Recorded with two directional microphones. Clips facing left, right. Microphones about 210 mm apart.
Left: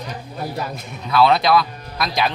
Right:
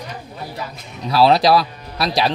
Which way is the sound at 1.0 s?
35° right (ahead or behind).